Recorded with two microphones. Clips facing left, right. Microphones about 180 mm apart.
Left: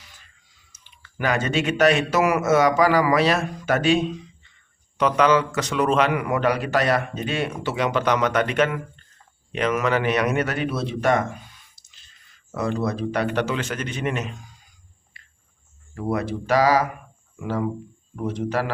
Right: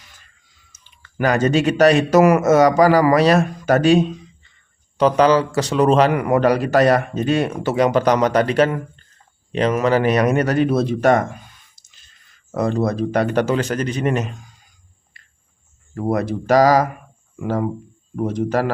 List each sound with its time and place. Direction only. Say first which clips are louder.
0.7 s a man's voice: right 1 dB; 45° right (ahead or behind)
12.5 s a man's voice: right 5 dB; 45° right (ahead or behind)
16.0 s a man's voice: right 5 dB; 40° right (ahead or behind)